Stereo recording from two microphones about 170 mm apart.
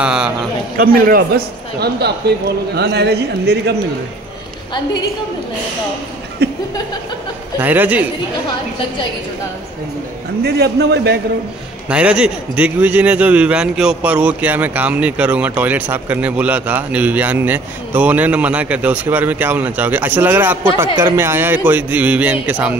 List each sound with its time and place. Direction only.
0.0 s a sound: 5° right (ahead or behind)
0.7 s a man's voice: 60° right (ahead or behind)
1.8 s speech: 75° right (ahead or behind)
6.4 s a sound: 70° right (ahead or behind)
7.5 s a man's voice: 10° right (ahead or behind)
10.4 s speech: 75° right (ahead or behind)
11.9 s a man's voice: 5° right (ahead or behind)